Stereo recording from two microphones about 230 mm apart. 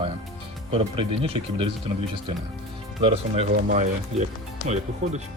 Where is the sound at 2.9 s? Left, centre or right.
Right.